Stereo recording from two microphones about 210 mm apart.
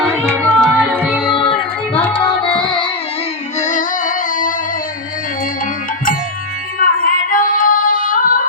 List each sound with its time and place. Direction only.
0.1 s music: 15° right (ahead or behind)
0.6 s music: centre (ahead or behind)
2.1 s music: 25° left (ahead or behind)
3.6 s music: 35° left (ahead or behind)
7.0 s female singing: 40° left (ahead or behind)